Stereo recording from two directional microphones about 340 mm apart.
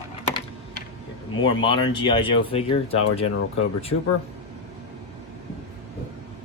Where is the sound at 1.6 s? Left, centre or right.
Centre.